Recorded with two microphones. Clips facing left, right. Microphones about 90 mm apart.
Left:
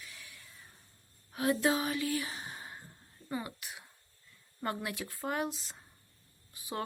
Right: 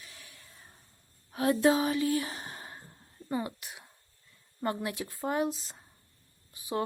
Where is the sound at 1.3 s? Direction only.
35° right (ahead or behind).